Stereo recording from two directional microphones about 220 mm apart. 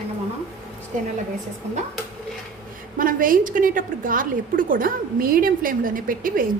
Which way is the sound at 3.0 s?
40° right (ahead or behind).